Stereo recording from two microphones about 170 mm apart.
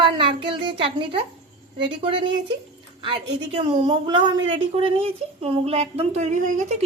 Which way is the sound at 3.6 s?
30° right (ahead or behind).